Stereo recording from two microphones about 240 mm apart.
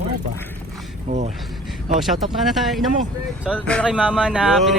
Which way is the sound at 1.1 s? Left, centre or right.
Right.